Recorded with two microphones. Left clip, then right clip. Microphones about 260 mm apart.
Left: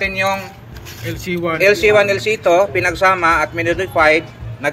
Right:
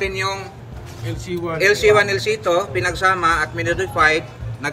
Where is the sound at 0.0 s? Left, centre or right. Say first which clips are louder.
Left 5 dB; centre.